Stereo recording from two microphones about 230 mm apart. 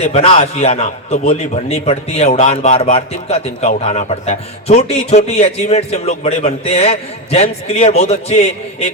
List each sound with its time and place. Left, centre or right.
0.0 s a man's voice: left